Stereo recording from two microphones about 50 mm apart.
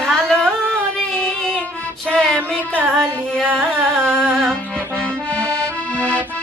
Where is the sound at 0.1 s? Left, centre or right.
Centre.